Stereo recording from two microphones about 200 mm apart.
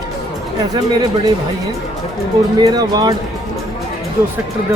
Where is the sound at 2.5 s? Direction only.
20° right (ahead or behind).